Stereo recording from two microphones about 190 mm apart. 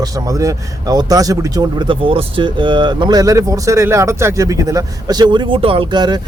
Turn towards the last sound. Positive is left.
turn(degrees=-25)  # may be behind; listen again after turning